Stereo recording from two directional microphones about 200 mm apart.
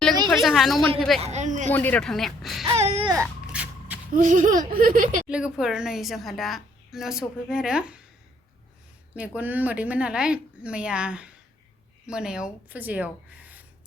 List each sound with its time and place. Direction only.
0.3 s a woman's voice: centre (ahead or behind)
1.2 s speech: 35° right (ahead or behind)
1.7 s speech: 10° left (ahead or behind)
2.7 s speech: 30° right (ahead or behind)
3.1 s a sound: 10° right (ahead or behind)
4.1 s speech: 40° right (ahead or behind)
5.3 s a woman's voice: 5° right (ahead or behind)
9.1 s a woman's voice: 5° right (ahead or behind)